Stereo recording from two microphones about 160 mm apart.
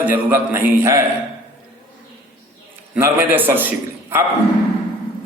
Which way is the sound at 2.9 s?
10° right (ahead or behind).